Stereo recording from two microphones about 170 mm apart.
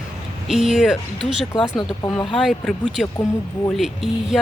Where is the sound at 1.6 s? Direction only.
25° left (ahead or behind).